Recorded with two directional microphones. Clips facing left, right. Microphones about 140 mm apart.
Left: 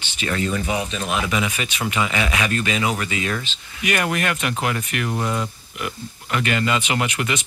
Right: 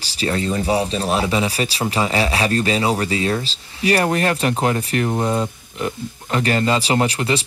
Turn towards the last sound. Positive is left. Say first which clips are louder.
# right 5 dB
turn(degrees=-30)  # may be behind; listen again after turning